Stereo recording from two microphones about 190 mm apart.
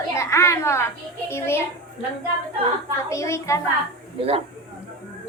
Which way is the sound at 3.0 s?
15° left (ahead or behind).